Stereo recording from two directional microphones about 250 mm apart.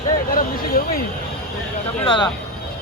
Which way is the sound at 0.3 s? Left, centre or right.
Left.